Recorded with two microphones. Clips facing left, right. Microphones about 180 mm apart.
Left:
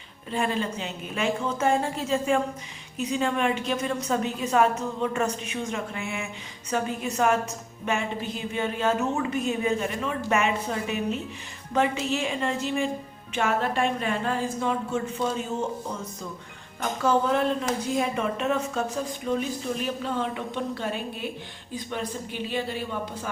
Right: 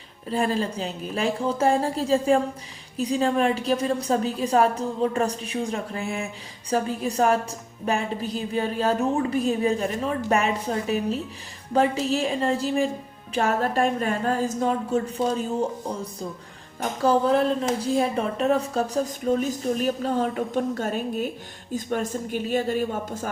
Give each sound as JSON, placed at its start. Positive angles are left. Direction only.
{"t": 0.3, "sound": "a woman's voice", "side_deg": -35}